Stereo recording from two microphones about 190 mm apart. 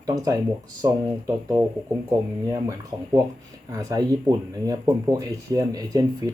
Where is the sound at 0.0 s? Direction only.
20° right (ahead or behind).